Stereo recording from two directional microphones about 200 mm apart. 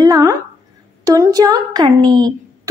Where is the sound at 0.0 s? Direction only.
20° right (ahead or behind).